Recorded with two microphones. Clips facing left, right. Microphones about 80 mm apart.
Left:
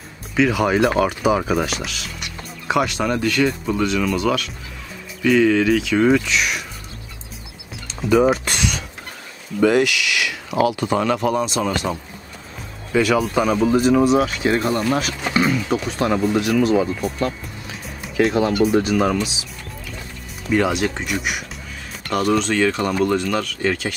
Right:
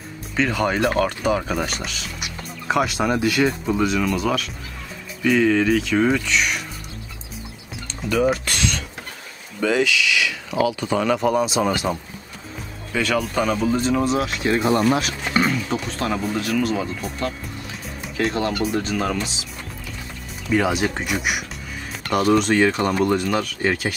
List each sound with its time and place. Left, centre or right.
0.4 s speech: centre
8.0 s speech: centre
8.5 s a sound: centre
9.6 s speech: centre
11.1 s speech: centre
12.9 s speech: centre
16.0 s speech: centre
18.0 s speech: centre
20.5 s speech: centre